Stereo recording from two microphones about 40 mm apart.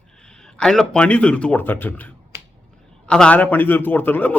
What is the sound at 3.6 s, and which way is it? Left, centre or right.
Speech, left.